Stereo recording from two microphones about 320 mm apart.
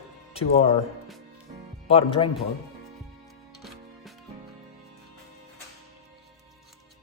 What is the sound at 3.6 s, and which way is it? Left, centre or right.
Music, centre.